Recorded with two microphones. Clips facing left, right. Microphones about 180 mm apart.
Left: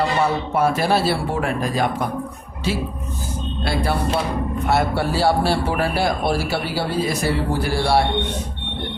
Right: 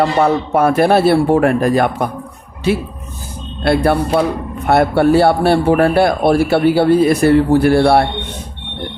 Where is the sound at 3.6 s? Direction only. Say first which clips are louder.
Right 9 dB; 60° right (ahead or behind).